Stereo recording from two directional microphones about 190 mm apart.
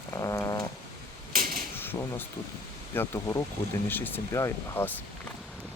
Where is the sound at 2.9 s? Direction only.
15° left (ahead or behind).